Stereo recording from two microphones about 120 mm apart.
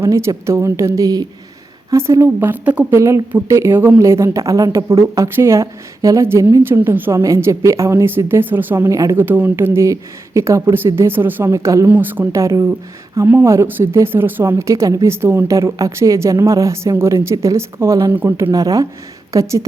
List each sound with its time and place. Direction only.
0.0 s a woman's voice: 25° right (ahead or behind)
11.9 s a woman's voice: 15° right (ahead or behind)